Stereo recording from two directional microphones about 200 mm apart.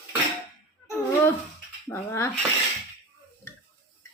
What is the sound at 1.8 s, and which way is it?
Speech, 15° left (ahead or behind).